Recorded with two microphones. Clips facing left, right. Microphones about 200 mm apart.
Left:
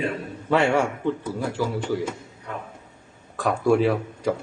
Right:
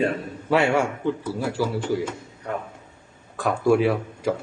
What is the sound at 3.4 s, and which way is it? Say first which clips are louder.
Speech: even; centre (ahead or behind).